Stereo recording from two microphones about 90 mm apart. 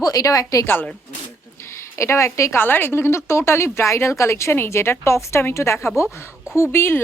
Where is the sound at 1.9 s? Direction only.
30° left (ahead or behind).